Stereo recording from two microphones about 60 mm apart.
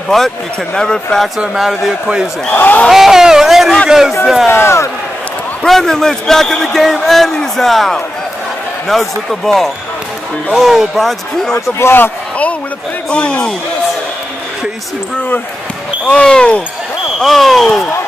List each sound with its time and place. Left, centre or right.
0.1 s a man's voice: centre
1.5 s speech: centre
2.5 s a man's voice: left
2.9 s speech: centre
4.5 s speech: left
5.7 s a man's voice: centre
11.8 s a man's voice: left
13.1 s a man's voice: centre
16.1 s speech: centre
17.2 s speech: centre